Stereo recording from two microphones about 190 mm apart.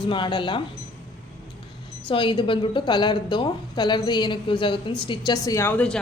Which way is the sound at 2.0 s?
25° left (ahead or behind).